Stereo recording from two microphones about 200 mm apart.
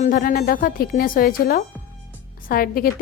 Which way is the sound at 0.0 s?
45° left (ahead or behind).